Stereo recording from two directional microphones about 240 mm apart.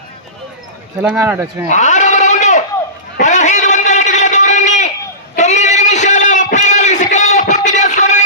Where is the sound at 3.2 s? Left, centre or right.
Left.